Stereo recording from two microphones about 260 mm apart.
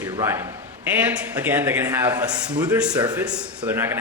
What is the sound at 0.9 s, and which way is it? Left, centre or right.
A man's voice, centre.